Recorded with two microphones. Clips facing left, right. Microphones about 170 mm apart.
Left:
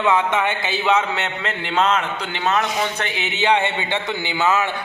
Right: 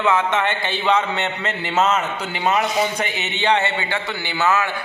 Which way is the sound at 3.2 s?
10° left (ahead or behind).